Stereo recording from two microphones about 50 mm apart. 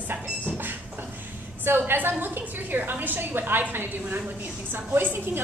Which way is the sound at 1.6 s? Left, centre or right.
Right.